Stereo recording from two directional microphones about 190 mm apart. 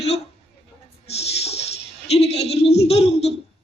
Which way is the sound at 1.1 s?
35° left (ahead or behind).